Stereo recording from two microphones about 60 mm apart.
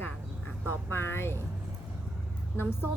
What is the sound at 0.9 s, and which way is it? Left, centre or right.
Speech, left.